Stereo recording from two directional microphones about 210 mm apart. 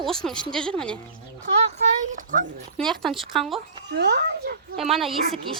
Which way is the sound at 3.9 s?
50° right (ahead or behind).